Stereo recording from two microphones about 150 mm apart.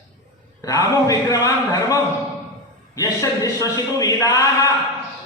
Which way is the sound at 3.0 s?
25° left (ahead or behind).